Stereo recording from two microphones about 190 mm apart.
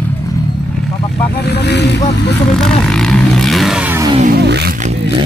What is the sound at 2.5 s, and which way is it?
Vehicle, 5° left (ahead or behind).